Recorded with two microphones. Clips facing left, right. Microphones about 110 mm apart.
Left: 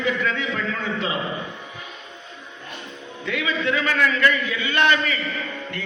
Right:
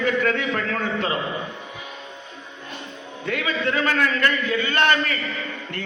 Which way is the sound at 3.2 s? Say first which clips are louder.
Even; 45° right (ahead or behind).